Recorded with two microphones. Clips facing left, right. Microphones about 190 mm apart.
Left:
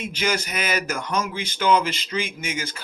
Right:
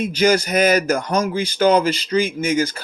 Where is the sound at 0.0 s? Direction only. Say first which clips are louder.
Right 9 dB; 40° right (ahead or behind).